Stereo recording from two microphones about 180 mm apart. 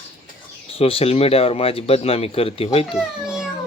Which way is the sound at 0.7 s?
30° left (ahead or behind).